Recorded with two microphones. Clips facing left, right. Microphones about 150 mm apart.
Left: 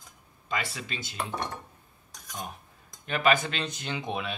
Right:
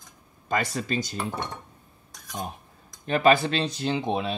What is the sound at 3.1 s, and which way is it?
Speech, 35° right (ahead or behind).